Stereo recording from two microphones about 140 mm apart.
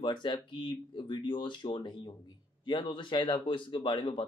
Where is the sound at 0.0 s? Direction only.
35° left (ahead or behind).